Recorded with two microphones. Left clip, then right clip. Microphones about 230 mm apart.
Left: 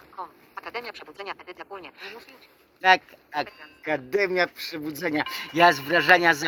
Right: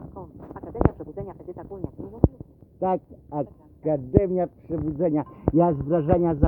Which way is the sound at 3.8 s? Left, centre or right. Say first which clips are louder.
Right 2 dB; left.